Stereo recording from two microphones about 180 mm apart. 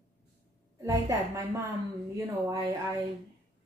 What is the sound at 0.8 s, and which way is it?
Speech, 15° right (ahead or behind).